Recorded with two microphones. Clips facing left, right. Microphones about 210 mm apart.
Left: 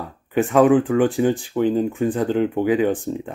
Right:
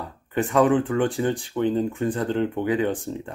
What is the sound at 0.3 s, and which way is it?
Speech, 20° left (ahead or behind).